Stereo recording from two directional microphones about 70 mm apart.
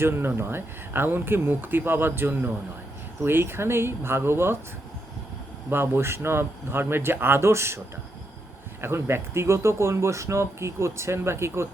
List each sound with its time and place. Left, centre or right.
0.0 s speech: right
5.7 s speech: right
8.8 s speech: right